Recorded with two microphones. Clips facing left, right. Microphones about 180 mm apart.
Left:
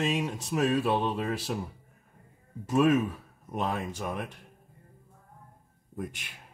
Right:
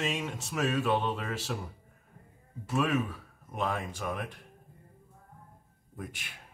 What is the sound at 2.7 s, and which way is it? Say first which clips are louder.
Speech: left 6 dB; 40° left (ahead or behind).